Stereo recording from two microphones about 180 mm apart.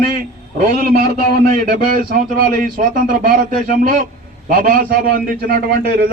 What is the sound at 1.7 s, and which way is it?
Speech, 50° right (ahead or behind).